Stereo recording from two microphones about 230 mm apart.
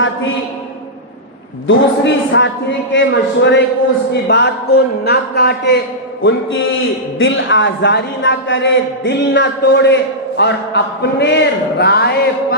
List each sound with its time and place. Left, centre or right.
1.6 s a man's voice: left
7.2 s a man's voice: left